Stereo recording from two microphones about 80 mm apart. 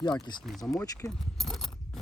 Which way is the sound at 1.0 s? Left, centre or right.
Centre.